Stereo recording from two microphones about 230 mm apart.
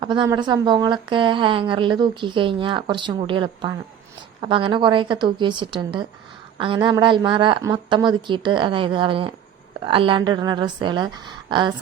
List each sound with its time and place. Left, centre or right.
0.0 s a woman's voice: centre